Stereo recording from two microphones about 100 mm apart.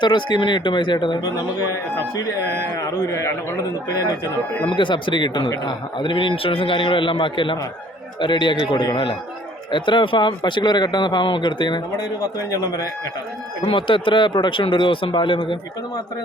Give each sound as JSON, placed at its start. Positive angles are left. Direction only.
{"t": 0.0, "sound": "a man's voice", "side_deg": 50}
{"t": 4.7, "sound": "a man's voice", "side_deg": 55}
{"t": 12.2, "sound": "a man's voice", "side_deg": 35}
{"t": 13.7, "sound": "speech", "side_deg": 55}